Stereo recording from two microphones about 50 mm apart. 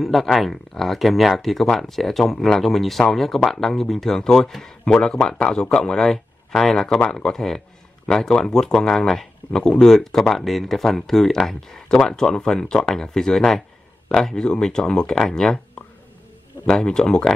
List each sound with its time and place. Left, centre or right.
0.0 s speech: centre
9.5 s speech: centre